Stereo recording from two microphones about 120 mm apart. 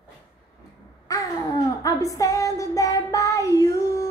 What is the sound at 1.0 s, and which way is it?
Child singing, 30° left (ahead or behind).